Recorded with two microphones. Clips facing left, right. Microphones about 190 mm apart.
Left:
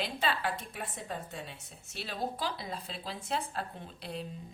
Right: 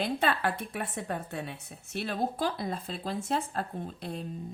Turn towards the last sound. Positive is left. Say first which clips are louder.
# right 5 dB
turn(degrees=-45)  # may be behind; listen again after turning